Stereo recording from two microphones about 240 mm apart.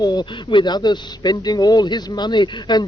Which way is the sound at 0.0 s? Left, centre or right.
Centre.